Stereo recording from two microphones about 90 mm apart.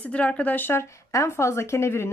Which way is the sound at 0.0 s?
15° left (ahead or behind).